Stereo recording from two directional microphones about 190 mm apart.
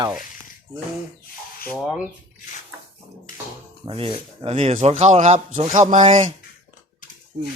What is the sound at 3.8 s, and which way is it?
Speech, 30° right (ahead or behind).